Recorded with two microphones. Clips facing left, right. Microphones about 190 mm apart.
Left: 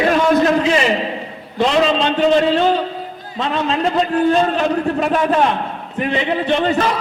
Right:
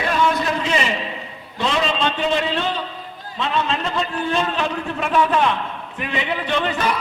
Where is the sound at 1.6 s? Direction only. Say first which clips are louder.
Left 6 dB; 40° left (ahead or behind).